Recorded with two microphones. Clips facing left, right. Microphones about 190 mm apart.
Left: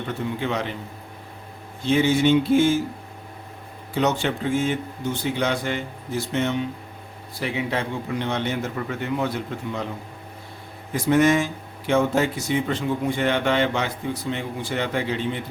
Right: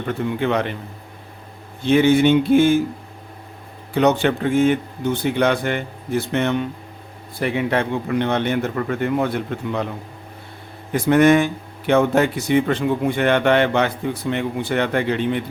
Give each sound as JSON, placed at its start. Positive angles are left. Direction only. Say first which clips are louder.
{"t": 0.3, "sound": "speech", "louder": "right 7 dB", "side_deg": -60}
{"t": 1.9, "sound": "speech", "louder": "right 4 dB", "side_deg": -60}
{"t": 3.9, "sound": "speech", "louder": "right 6 dB", "side_deg": -60}
{"t": 10.9, "sound": "speech", "louder": "right 4 dB", "side_deg": -60}